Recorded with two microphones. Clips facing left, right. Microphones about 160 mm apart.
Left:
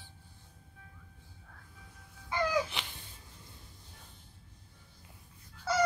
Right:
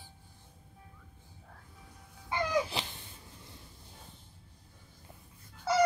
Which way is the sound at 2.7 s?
35° right (ahead or behind).